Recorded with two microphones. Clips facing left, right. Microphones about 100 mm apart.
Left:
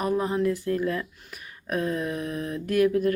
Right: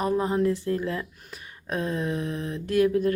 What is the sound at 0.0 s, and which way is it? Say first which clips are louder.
Speech: right 1 dB; 25° right (ahead or behind).